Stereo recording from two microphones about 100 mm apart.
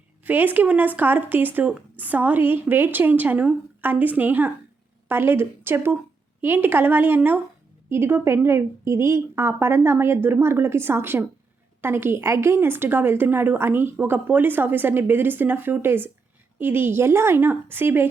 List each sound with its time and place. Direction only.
0.3 s a woman's voice: 20° right (ahead or behind)